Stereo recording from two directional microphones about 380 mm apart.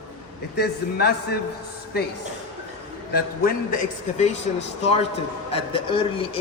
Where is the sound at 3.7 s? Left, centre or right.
Centre.